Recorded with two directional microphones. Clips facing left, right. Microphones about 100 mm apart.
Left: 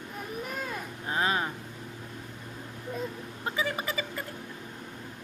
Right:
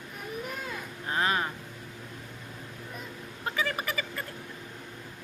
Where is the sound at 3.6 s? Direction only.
20° left (ahead or behind).